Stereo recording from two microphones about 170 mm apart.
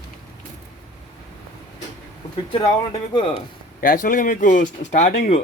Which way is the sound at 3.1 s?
30° left (ahead or behind).